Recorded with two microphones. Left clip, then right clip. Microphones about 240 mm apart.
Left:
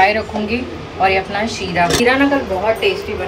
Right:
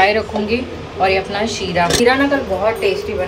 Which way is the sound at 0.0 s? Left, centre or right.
Centre.